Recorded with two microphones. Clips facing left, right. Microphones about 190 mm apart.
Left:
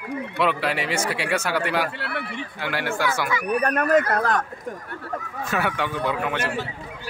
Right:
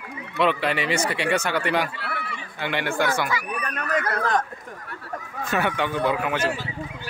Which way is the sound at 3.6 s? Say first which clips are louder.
Left 8 dB; 50° left (ahead or behind).